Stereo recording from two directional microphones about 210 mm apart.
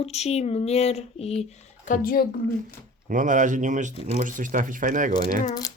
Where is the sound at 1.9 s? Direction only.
40° left (ahead or behind).